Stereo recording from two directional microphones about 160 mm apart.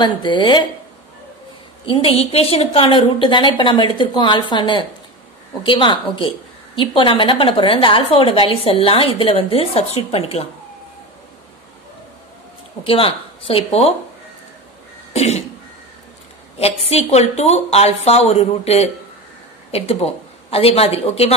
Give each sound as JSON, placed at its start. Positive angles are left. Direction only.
{"t": 0.0, "sound": "speech", "side_deg": 30}
{"t": 1.9, "sound": "a woman's voice", "side_deg": 35}
{"t": 12.8, "sound": "a woman's voice", "side_deg": 35}
{"t": 15.1, "sound": "a woman's voice", "side_deg": 40}
{"t": 16.5, "sound": "a woman's voice", "side_deg": 40}